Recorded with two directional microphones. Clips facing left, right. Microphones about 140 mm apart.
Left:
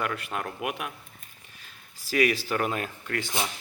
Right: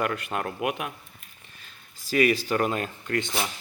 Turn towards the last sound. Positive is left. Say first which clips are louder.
# right 4 dB
turn(degrees=5)  # may be behind; listen again after turning